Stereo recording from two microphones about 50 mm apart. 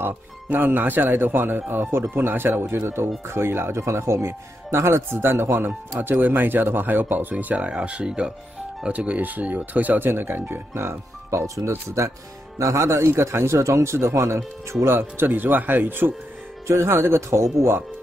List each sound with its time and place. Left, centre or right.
0.0 s speech: right
6.2 s speech: right
13.2 s speech: right
14.9 s speech: right
16.6 s speech: right